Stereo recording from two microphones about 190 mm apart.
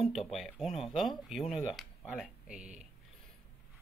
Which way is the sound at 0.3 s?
Centre (ahead or behind).